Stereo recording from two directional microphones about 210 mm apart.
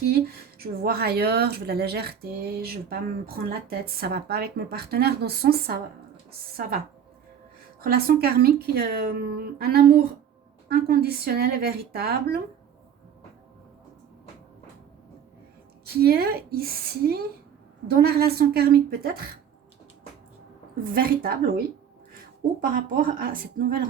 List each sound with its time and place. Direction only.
0.0 s speech: 50° right (ahead or behind)
7.8 s speech: 45° right (ahead or behind)
15.9 s speech: 45° right (ahead or behind)
20.9 s speech: 45° right (ahead or behind)
22.7 s speech: 40° right (ahead or behind)